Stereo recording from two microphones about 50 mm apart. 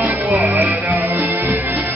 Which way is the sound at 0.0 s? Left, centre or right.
Right.